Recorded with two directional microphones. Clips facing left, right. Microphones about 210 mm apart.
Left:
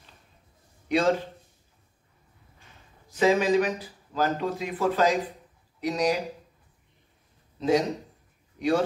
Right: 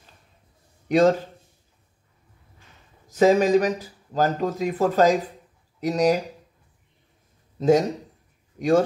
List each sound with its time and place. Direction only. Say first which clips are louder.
0.8 s a man's voice: right 6 dB; 45° right (ahead or behind)
3.1 s speech: right 5 dB; 45° right (ahead or behind)
7.5 s speech: right 5 dB; 45° right (ahead or behind)